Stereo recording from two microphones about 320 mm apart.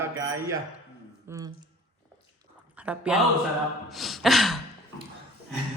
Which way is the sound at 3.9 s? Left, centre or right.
Centre.